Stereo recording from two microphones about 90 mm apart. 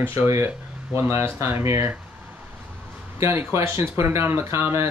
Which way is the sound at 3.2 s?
30° right (ahead or behind).